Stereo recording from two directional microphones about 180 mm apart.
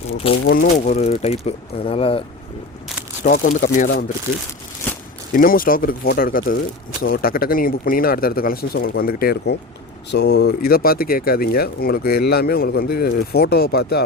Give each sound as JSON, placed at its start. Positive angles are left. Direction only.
{"t": 0.1, "sound": "speech", "side_deg": 30}
{"t": 0.4, "sound": "speech", "side_deg": 55}
{"t": 1.2, "sound": "speech", "side_deg": 35}
{"t": 3.2, "sound": "speech", "side_deg": 45}
{"t": 5.3, "sound": "speech", "side_deg": 50}